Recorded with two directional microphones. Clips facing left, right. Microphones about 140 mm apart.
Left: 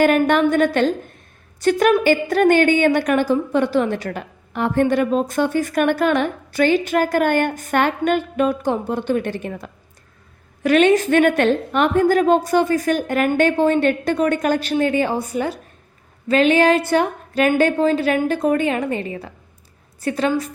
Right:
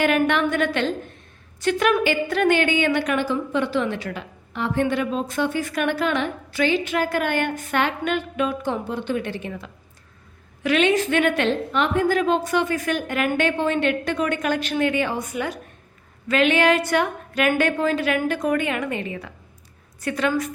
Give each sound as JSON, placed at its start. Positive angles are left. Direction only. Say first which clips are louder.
{"t": 0.0, "sound": "a woman's voice", "louder": "left 5 dB", "side_deg": 40}